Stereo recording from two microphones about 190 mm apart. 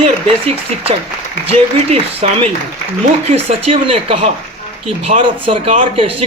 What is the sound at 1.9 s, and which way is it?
A man's voice, 30° right (ahead or behind).